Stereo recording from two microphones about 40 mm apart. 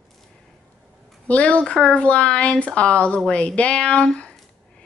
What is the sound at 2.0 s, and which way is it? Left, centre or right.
Speech, left.